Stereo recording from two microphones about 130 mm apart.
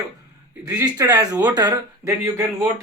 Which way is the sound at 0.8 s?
30° right (ahead or behind).